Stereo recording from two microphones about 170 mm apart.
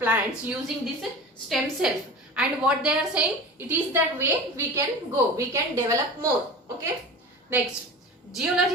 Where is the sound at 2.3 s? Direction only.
5° right (ahead or behind).